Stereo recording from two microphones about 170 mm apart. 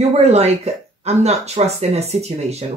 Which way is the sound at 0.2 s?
40° right (ahead or behind).